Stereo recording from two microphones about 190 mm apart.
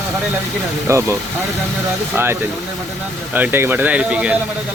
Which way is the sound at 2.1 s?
10° right (ahead or behind).